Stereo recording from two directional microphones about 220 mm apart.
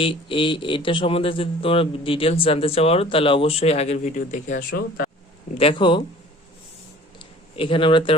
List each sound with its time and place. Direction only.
0.0 s speech: 25° left (ahead or behind)
5.5 s speech: 25° left (ahead or behind)
7.5 s speech: 25° left (ahead or behind)